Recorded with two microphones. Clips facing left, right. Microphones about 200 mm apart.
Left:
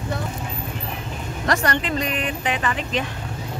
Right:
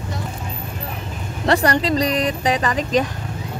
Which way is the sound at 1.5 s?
35° right (ahead or behind).